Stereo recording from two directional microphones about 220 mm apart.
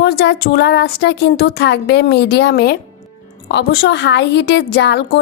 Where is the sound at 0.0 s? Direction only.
50° left (ahead or behind).